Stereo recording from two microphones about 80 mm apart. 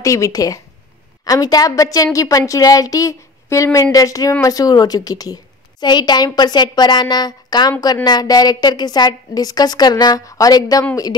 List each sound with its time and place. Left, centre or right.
0.0 s a woman's voice: left
10.2 s speech: left